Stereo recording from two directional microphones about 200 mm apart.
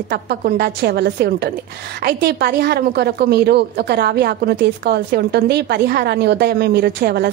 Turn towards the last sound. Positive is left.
turn(degrees=-55)  # may be behind; listen again after turning